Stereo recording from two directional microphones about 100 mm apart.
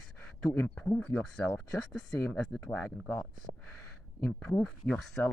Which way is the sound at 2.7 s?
15° left (ahead or behind).